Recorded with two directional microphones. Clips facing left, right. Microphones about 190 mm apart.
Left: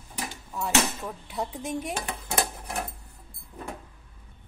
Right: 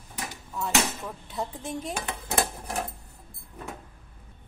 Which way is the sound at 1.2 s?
10° left (ahead or behind).